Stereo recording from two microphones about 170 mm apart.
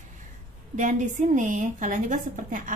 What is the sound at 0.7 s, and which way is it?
A woman's voice, 50° right (ahead or behind).